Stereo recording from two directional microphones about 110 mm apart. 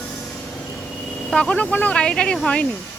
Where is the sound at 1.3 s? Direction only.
10° left (ahead or behind).